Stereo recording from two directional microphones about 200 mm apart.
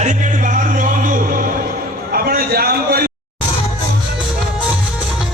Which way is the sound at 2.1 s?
50° right (ahead or behind).